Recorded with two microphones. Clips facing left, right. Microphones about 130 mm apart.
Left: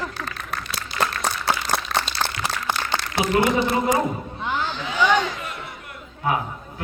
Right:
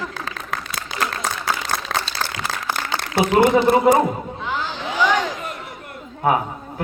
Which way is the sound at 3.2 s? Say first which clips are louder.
Right 5 dB; 60° right (ahead or behind).